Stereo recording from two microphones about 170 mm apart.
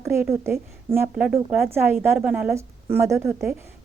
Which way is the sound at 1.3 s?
Centre (ahead or behind).